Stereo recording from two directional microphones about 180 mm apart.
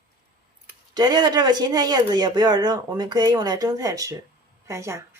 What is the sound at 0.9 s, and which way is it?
A woman's voice, 25° right (ahead or behind).